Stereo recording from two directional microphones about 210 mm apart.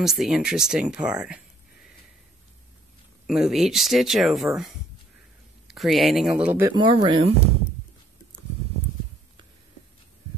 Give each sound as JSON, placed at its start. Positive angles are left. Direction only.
{"t": 0.0, "sound": "speech", "side_deg": 0}
{"t": 3.3, "sound": "speech", "side_deg": 0}
{"t": 6.7, "sound": "speech", "side_deg": -20}